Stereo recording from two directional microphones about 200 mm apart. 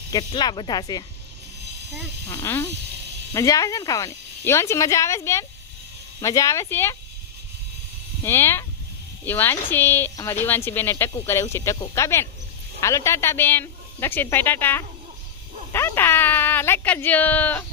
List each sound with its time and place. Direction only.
0.1 s speech: 20° left (ahead or behind)
2.3 s speech: 10° left (ahead or behind)
8.2 s speech: 10° left (ahead or behind)